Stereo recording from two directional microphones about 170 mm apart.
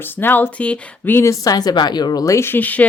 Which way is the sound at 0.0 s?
10° left (ahead or behind).